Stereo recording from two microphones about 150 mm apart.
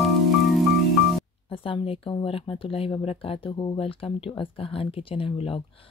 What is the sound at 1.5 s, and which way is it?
Speech, 35° left (ahead or behind).